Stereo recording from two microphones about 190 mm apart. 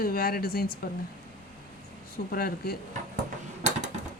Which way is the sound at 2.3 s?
50° left (ahead or behind).